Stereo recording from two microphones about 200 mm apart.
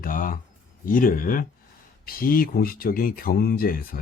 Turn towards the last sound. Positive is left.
turn(degrees=45)  # may be behind; listen again after turning